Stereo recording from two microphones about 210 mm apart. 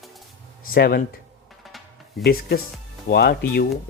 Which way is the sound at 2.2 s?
45° left (ahead or behind).